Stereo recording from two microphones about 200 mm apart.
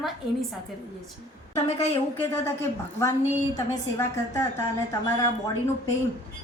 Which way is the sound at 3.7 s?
15° left (ahead or behind).